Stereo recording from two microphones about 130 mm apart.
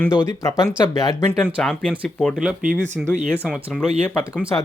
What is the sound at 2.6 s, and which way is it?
Speech, 80° right.